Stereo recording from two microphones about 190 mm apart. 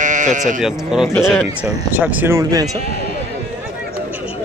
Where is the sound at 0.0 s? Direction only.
40° right (ahead or behind).